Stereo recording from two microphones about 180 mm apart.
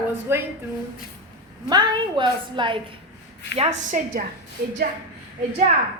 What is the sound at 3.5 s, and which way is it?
Speech, 35° right (ahead or behind).